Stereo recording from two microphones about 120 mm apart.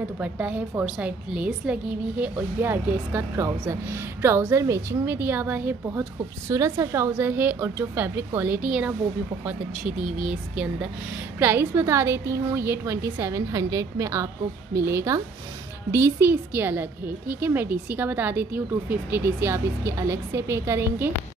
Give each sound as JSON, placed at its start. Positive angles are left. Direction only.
{"t": 0.2, "sound": "a woman's voice", "side_deg": -10}
{"t": 11.3, "sound": "a woman's voice", "side_deg": -20}